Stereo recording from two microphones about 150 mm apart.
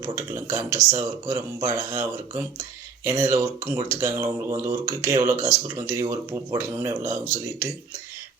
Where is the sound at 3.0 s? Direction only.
20° right (ahead or behind).